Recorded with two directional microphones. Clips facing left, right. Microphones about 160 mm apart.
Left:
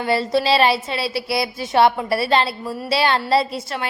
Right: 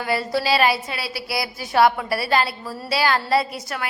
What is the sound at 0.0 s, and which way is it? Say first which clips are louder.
A woman's voice: left 4 dB; 25° left (ahead or behind).